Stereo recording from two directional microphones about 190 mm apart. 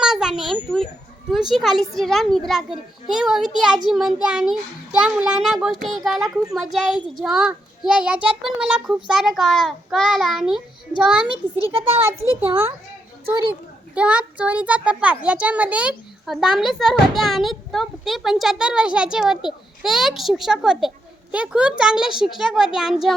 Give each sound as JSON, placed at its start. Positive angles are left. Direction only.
{"t": 0.0, "sound": "a sound", "side_deg": -5}
{"t": 1.3, "sound": "a child's voice", "side_deg": 0}
{"t": 11.5, "sound": "a child's voice", "side_deg": -30}
{"t": 13.5, "sound": "a child's voice", "side_deg": -5}